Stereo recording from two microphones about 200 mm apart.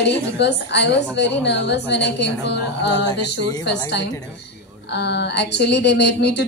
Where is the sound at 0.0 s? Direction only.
55° left (ahead or behind).